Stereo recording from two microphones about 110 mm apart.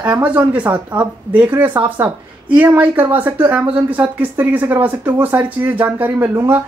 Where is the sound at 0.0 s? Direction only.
15° right (ahead or behind).